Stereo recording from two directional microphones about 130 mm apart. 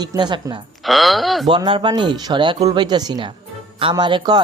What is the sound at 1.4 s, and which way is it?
Speech, 40° right (ahead or behind).